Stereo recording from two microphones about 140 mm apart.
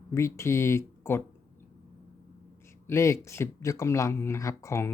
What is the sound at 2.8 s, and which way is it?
Speech, 20° left (ahead or behind).